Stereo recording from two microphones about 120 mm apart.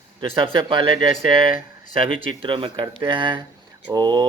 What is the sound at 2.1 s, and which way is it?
A man's voice, 45° right (ahead or behind).